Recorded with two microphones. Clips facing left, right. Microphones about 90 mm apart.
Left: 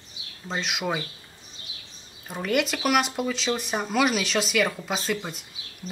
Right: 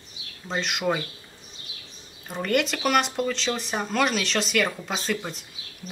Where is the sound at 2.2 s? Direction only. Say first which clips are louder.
Right 1 dB; centre (ahead or behind).